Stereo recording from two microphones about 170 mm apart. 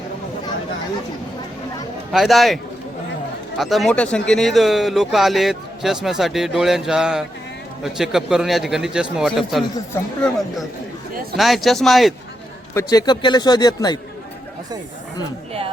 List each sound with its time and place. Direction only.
2.1 s speech: centre (ahead or behind)
3.6 s speech: centre (ahead or behind)
12.7 s a man's voice: 20° left (ahead or behind)